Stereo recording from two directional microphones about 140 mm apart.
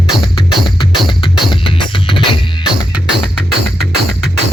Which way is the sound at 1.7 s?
35° left (ahead or behind).